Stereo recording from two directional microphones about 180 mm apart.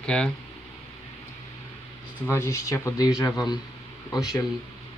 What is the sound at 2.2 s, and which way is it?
Speech, 15° left (ahead or behind).